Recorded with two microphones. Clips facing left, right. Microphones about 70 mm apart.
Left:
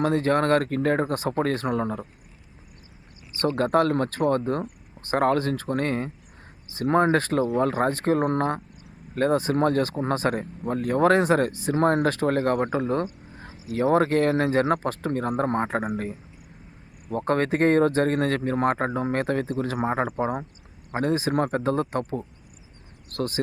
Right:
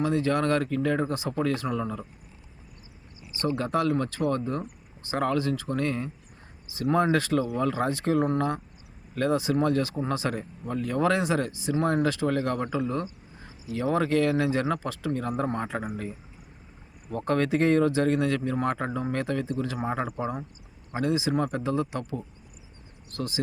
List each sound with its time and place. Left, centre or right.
0.0 s speech: left
3.3 s speech: left
13.3 s a sound: left
13.7 s speech: left
17.1 s speech: left